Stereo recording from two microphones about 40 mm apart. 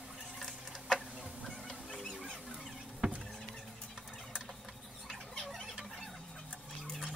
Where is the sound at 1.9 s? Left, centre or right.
Centre.